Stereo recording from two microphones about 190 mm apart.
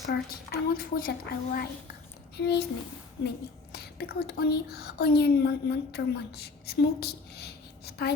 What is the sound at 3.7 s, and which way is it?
A woman's voice, 55° left (ahead or behind).